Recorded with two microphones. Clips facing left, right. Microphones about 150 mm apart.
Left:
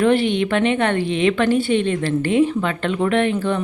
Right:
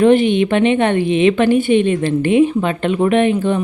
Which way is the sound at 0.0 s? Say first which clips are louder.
Right 5 dB; 20° right (ahead or behind).